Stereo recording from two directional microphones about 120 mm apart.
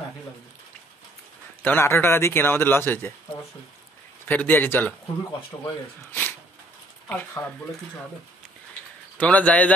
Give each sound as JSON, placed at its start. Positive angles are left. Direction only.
{"t": 1.6, "sound": "speech", "side_deg": 15}
{"t": 4.3, "sound": "a man's voice", "side_deg": 15}
{"t": 7.1, "sound": "a man's voice", "side_deg": 10}
{"t": 9.2, "sound": "a man's voice", "side_deg": 10}